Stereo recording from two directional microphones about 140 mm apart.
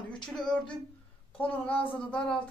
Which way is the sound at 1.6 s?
40° left (ahead or behind).